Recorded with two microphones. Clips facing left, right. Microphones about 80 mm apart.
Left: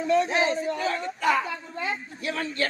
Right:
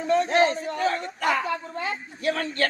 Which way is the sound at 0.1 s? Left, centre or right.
Right.